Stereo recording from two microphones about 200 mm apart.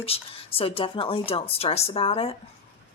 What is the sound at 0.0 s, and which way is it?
Speech, 30° left (ahead or behind).